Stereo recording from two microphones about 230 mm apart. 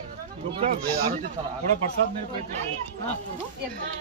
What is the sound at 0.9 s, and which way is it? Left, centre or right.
Speech, centre.